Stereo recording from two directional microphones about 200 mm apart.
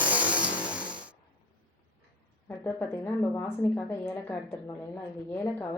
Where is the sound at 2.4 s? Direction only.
10° left (ahead or behind).